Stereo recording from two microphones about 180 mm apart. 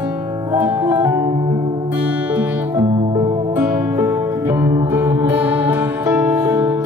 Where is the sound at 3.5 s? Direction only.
5° right (ahead or behind).